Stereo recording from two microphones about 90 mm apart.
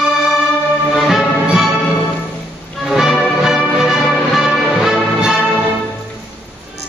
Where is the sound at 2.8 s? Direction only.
5° right (ahead or behind).